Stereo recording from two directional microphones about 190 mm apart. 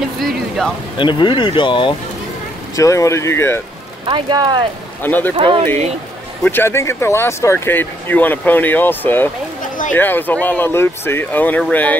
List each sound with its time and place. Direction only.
0.2 s speech: centre (ahead or behind)
0.9 s speech: 25° left (ahead or behind)
4.0 s speech: 25° right (ahead or behind)
5.0 s speech: 10° left (ahead or behind)
5.3 s speech: 25° right (ahead or behind)
6.4 s speech: 10° left (ahead or behind)